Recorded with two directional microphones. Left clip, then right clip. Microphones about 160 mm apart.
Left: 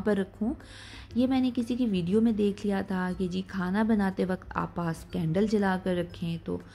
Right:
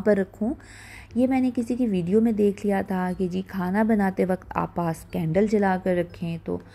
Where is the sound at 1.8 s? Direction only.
40° right (ahead or behind).